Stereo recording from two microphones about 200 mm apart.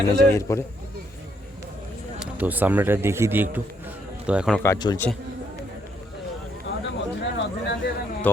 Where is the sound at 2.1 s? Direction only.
10° right (ahead or behind).